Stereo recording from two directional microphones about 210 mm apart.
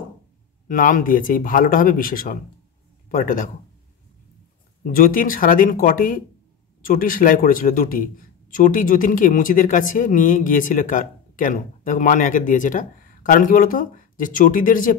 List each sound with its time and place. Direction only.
0.7 s a man's voice: 40° left (ahead or behind)
4.9 s a man's voice: 40° left (ahead or behind)